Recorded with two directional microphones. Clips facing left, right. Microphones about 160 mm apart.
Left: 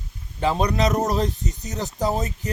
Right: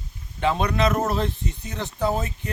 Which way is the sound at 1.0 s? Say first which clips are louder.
Left 2 dB; 40° left (ahead or behind).